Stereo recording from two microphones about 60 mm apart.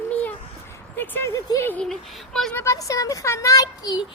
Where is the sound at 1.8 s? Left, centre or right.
Centre.